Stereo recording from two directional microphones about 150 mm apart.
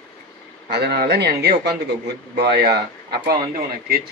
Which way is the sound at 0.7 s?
90° right.